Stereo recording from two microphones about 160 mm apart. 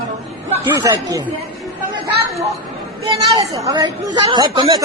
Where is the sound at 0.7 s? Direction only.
20° right (ahead or behind).